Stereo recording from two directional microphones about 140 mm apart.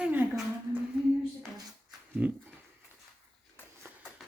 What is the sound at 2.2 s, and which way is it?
Speech, 10° right (ahead or behind).